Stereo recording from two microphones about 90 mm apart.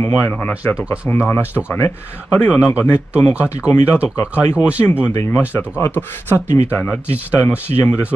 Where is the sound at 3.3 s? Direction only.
20° right (ahead or behind).